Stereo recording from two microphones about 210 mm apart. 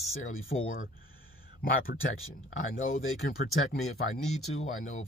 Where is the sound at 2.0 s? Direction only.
70° left (ahead or behind).